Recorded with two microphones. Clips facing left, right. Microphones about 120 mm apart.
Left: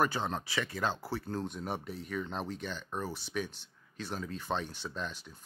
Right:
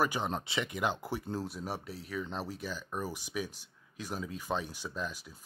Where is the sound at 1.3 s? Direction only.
5° right (ahead or behind).